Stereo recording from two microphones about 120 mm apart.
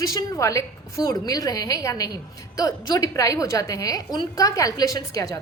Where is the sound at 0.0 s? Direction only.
30° left (ahead or behind).